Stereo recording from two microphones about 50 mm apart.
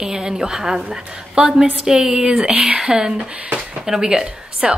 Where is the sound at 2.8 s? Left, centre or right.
Centre.